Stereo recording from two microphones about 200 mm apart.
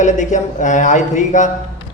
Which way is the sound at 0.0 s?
35° left (ahead or behind).